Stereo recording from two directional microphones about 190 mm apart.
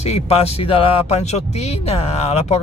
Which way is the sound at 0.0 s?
35° left (ahead or behind).